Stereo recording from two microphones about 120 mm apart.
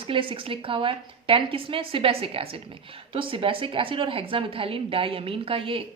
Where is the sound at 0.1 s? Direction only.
45° right (ahead or behind).